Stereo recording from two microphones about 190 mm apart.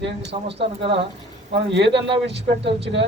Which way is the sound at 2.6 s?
65° right (ahead or behind).